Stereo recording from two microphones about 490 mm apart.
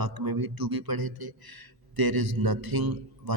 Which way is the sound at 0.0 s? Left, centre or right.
Right.